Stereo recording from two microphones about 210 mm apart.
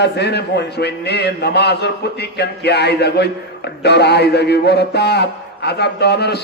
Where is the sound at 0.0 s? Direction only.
50° left (ahead or behind).